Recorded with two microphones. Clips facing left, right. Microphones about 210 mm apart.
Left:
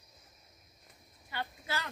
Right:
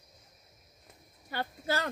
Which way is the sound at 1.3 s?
40° right (ahead or behind).